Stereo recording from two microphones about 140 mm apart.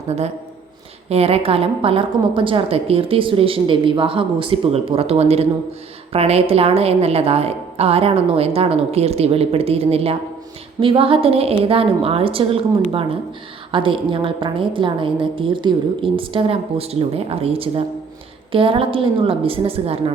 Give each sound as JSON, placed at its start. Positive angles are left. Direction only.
{"t": 1.1, "sound": "a woman's voice", "side_deg": -45}